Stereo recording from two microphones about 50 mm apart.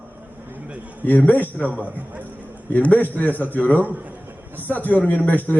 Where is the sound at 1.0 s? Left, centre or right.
Left.